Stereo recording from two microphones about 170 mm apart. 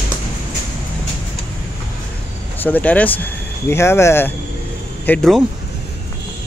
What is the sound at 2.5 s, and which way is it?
Speech, 10° left (ahead or behind).